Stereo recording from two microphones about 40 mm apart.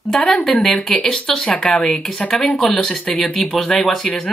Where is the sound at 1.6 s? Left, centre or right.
Centre.